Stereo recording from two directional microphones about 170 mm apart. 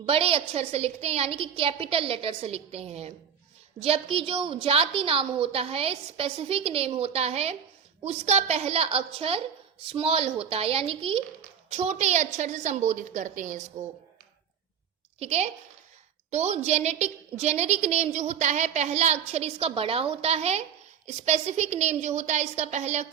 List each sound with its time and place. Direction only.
0.0 s a woman's voice: 35° right (ahead or behind)
15.2 s a woman's voice: 40° right (ahead or behind)